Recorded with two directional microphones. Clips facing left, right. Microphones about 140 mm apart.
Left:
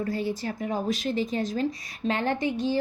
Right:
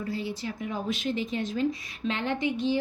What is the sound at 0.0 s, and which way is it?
A woman's voice, 45° left (ahead or behind).